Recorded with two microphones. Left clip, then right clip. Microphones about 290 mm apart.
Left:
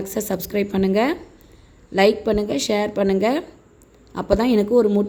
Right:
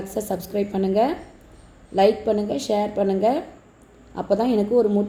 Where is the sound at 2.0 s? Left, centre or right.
Left.